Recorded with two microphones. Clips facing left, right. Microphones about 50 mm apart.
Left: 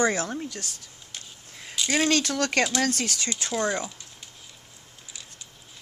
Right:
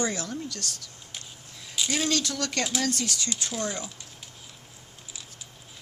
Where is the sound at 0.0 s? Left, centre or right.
Left.